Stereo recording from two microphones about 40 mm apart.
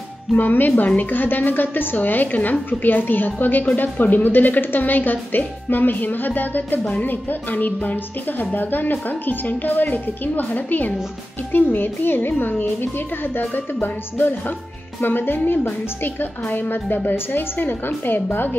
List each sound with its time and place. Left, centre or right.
0.4 s a woman's voice: left